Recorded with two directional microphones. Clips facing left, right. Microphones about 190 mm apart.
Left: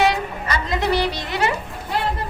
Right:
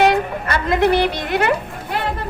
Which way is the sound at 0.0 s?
55° right (ahead or behind).